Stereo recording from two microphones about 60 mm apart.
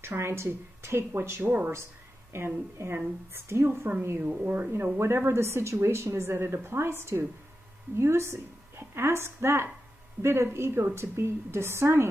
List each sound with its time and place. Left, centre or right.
0.0 s speech: right
1.4 s speech: right
2.3 s speech: right
4.2 s a woman's voice: right